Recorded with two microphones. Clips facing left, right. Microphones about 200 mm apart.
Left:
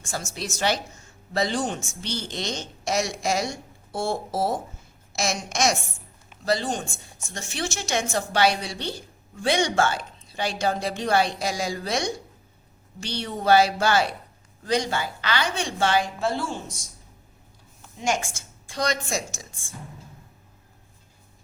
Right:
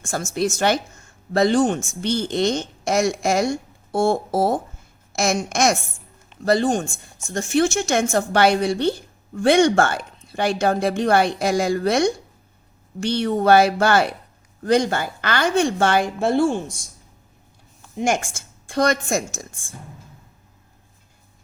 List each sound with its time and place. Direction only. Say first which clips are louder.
0.0 s a woman's voice: right 10 dB; 50° right (ahead or behind)
17.9 s a woman's voice: right 5 dB; 55° right (ahead or behind)